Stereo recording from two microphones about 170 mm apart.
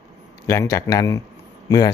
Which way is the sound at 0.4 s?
15° left (ahead or behind).